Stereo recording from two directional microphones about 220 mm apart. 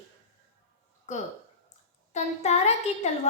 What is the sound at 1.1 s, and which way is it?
A woman's voice, 35° left (ahead or behind).